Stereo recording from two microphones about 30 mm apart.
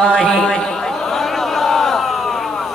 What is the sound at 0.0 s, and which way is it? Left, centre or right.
Speech, left.